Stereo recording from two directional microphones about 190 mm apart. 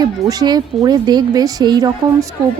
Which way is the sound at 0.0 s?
20° right (ahead or behind).